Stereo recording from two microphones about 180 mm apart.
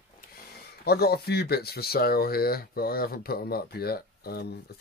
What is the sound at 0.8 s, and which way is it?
Speech, 60° left (ahead or behind).